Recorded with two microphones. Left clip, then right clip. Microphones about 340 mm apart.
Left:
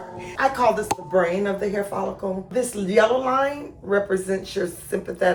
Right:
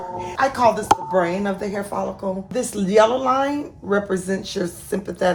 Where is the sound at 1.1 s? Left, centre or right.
Centre.